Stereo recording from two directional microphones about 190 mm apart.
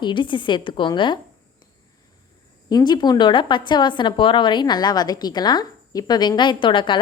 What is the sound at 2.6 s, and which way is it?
Speech, 20° left (ahead or behind).